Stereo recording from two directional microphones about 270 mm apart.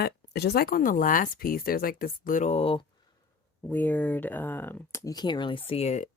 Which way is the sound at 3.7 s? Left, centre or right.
Centre.